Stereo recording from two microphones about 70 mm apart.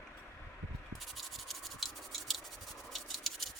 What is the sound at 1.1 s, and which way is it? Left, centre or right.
Scratch, centre.